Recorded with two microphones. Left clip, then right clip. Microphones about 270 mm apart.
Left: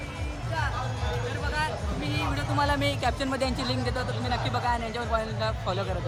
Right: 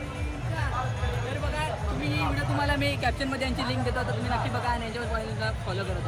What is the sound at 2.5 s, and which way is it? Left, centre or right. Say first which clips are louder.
Speech: left 3 dB; centre.